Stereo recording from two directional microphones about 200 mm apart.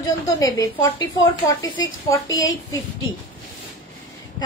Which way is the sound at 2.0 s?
20° left (ahead or behind).